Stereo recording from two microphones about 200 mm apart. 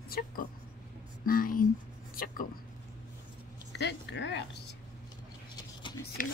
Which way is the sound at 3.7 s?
60° left (ahead or behind).